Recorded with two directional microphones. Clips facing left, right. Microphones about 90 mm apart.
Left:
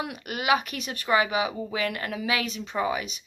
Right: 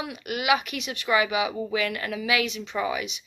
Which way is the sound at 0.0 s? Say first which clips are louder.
Right 1 dB; 45° left (ahead or behind).